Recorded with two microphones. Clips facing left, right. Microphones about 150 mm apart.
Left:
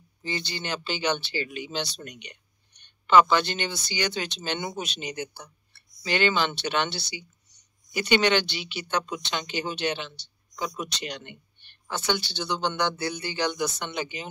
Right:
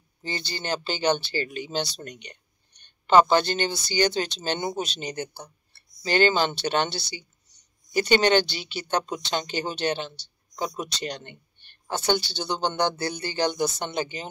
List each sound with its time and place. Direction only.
0.2 s speech: 35° right (ahead or behind)